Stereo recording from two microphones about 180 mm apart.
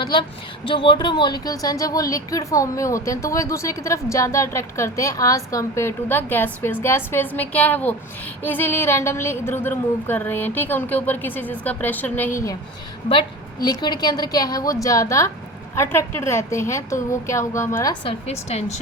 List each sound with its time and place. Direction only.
0.0 s a woman's voice: 30° left (ahead or behind)
18.0 s a woman's voice: 35° left (ahead or behind)